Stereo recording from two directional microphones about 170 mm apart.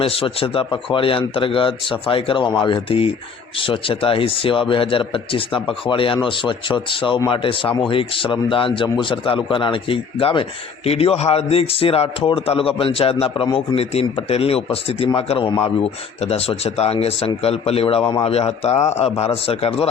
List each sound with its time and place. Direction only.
0.0 s speech: 35° left (ahead or behind)